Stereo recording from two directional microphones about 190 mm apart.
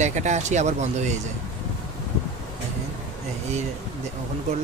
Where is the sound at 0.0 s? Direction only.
40° right (ahead or behind).